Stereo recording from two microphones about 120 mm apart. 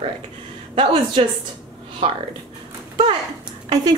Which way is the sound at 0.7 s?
45° right (ahead or behind).